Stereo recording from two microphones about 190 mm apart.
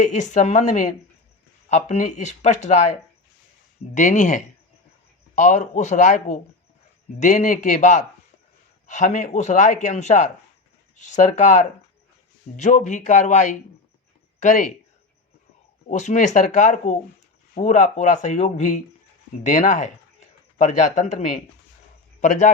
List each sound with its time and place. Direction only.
0.0 s speech: 40° left (ahead or behind)
3.9 s speech: 40° left (ahead or behind)
15.9 s speech: 40° left (ahead or behind)